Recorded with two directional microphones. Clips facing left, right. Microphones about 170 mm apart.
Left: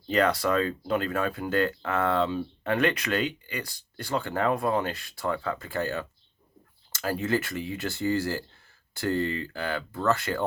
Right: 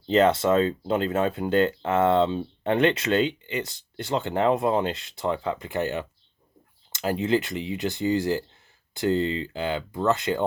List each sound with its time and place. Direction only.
0.1 s speech: 25° right (ahead or behind)